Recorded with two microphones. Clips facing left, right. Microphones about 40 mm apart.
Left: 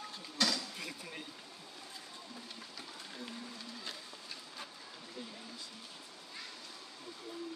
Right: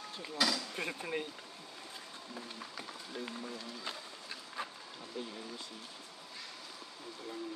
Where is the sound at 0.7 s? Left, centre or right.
Right.